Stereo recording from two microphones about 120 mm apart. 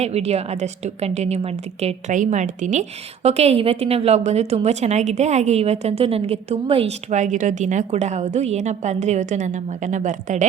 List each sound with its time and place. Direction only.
0.0 s a woman's voice: 65° right (ahead or behind); by 2.8 s 85° right
3.2 s a woman's voice: 60° right (ahead or behind)
7.1 s a woman's voice: 90° right